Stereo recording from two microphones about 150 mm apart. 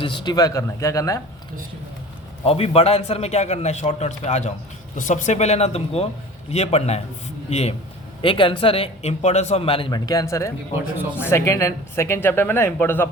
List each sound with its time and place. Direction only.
0.0 s speech: 30° left (ahead or behind)
2.4 s a man's voice: 40° left (ahead or behind)
8.2 s a man's voice: 35° left (ahead or behind); by 13.1 s 15° left (ahead or behind)